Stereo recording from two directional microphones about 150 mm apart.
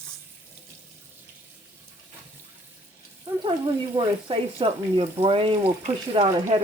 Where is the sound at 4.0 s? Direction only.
25° right (ahead or behind).